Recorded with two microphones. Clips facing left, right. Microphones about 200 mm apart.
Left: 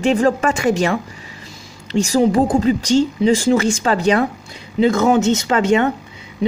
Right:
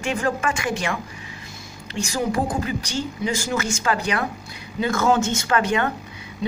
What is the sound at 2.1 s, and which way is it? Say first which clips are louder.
Speech: left 9 dB; 30° left (ahead or behind).